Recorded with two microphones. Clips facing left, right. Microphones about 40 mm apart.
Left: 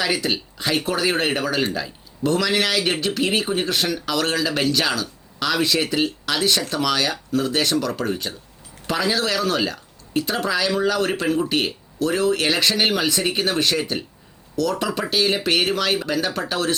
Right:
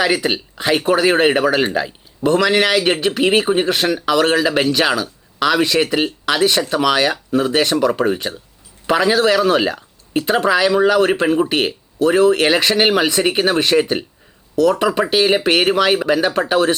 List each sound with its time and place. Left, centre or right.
0.0 s speech: right